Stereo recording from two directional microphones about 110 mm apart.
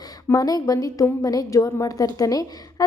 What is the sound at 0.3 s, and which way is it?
A woman's voice, 35° left (ahead or behind).